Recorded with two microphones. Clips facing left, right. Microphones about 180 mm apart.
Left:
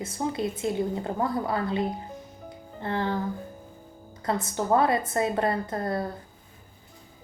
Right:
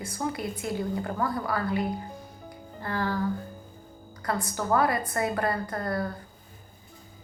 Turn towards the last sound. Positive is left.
turn(degrees=25)  # may be behind; listen again after turning